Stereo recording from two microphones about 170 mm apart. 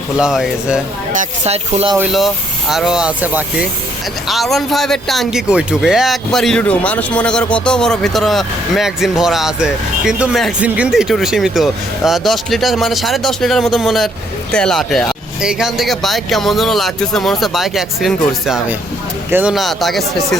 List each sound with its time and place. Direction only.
0.2 s speech: 5° right (ahead or behind)
1.2 s speech: 40° right (ahead or behind)
2.1 s speech: centre (ahead or behind)